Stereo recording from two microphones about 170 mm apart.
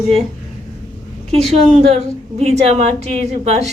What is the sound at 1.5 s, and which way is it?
A woman's voice, 40° right (ahead or behind).